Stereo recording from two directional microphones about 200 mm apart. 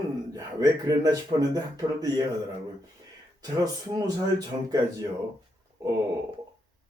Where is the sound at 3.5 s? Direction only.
15° right (ahead or behind).